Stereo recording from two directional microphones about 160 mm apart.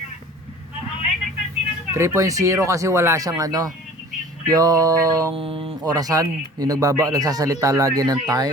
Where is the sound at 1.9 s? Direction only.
15° right (ahead or behind).